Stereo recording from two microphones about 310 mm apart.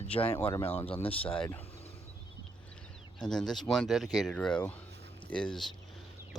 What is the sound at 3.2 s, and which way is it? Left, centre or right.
Speech, centre.